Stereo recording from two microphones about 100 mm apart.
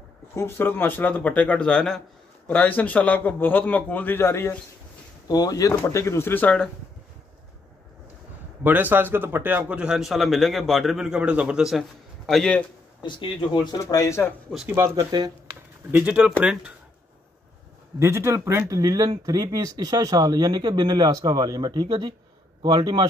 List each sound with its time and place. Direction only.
0.3 s a man's voice: 25° left (ahead or behind)
5.3 s speech: 40° left (ahead or behind); by 6.5 s 20° left (ahead or behind)
8.6 s a man's voice: 20° right (ahead or behind); by 12.6 s 5° left (ahead or behind)
13.0 s speech: 55° left (ahead or behind)
13.7 s speech: 35° left (ahead or behind)
14.5 s a man's voice: centre (ahead or behind)
15.0 s speech: 40° right (ahead or behind)
16.0 s a man's voice: 10° right (ahead or behind)
17.9 s speech: 25° right (ahead or behind)
18.8 s speech: 40° right (ahead or behind); by 23.0 s 55° right (ahead or behind)